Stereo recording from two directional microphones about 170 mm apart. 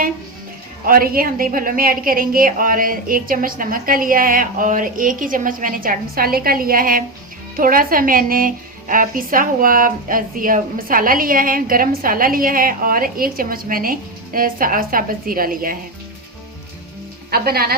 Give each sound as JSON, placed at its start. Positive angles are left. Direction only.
{"t": 0.9, "sound": "a woman's voice", "side_deg": -60}
{"t": 17.3, "sound": "a woman's voice", "side_deg": -65}